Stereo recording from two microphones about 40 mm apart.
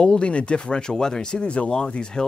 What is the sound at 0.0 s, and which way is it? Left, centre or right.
Speech, left.